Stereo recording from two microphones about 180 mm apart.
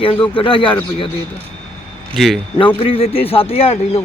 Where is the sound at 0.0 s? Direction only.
30° left (ahead or behind).